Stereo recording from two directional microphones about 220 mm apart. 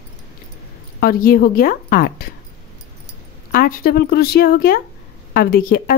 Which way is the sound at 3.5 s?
40° left (ahead or behind).